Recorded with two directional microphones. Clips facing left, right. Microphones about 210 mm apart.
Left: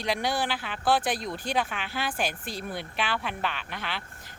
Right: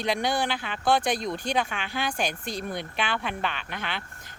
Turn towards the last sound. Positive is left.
turn(degrees=0)  # may be behind; listen again after turning